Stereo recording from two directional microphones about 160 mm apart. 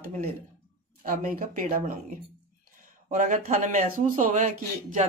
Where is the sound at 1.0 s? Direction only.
60° right (ahead or behind).